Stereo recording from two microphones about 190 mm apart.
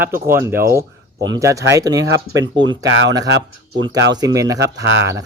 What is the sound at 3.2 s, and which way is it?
Speech, 70° right (ahead or behind).